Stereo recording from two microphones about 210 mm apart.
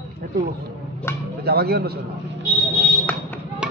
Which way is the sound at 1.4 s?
50° right (ahead or behind).